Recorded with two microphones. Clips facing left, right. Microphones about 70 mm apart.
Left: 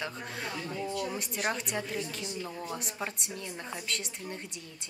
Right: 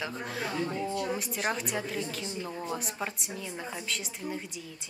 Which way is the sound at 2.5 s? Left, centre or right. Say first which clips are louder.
Right 3 dB; centre.